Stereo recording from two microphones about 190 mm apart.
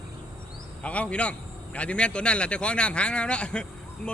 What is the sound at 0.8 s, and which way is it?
A man's voice, 5° left (ahead or behind).